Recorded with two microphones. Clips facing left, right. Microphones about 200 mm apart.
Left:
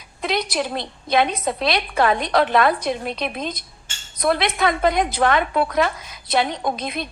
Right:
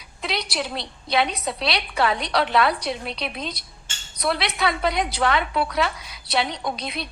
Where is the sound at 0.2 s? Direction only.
50° left (ahead or behind).